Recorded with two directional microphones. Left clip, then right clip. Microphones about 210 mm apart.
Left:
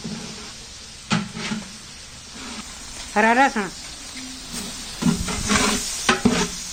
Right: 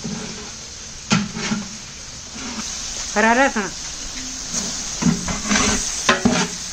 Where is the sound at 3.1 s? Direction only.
25° left (ahead or behind).